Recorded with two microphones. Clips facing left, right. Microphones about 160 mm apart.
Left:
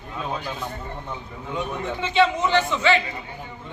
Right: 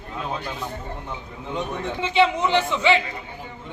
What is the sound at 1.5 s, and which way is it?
A man's voice, 15° right (ahead or behind).